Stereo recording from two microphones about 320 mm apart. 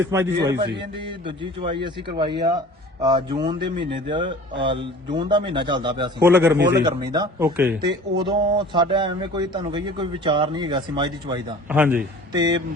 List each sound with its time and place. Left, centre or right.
0.1 s a man's voice: centre
6.6 s a man's voice: right
6.8 s speech: centre